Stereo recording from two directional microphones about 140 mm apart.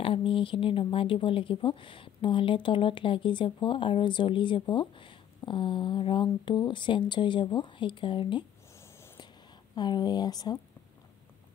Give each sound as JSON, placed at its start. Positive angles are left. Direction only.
{"t": 0.0, "sound": "speech", "side_deg": 40}
{"t": 9.8, "sound": "speech", "side_deg": 30}